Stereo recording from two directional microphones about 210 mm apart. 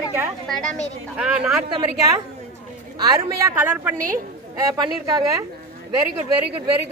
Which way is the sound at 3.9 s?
40° right (ahead or behind).